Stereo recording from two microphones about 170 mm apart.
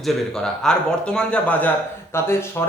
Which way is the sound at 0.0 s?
5° left (ahead or behind).